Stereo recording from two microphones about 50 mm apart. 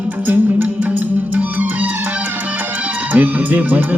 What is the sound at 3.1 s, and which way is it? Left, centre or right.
Speech, right.